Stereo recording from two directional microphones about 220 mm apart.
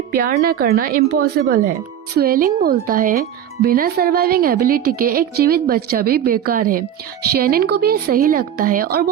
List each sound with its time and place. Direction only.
0.1 s a woman's voice: 40° right (ahead or behind)